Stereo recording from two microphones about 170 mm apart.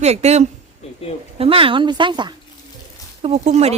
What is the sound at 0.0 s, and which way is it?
Speech, 40° right (ahead or behind).